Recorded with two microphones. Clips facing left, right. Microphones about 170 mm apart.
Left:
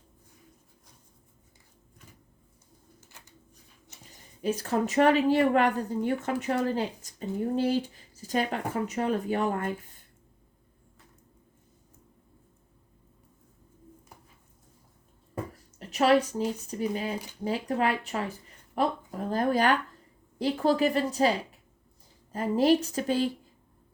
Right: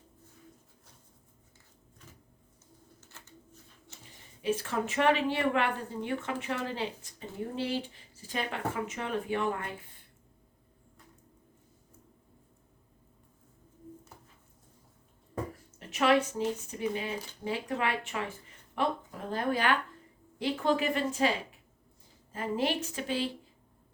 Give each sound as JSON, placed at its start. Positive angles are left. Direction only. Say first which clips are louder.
{"t": 3.0, "sound": "a sound", "louder": "right 2 dB", "side_deg": 15}
{"t": 4.1, "sound": "speech", "louder": "left 1 dB", "side_deg": 40}
{"t": 15.9, "sound": "speech", "louder": "left 3 dB", "side_deg": 35}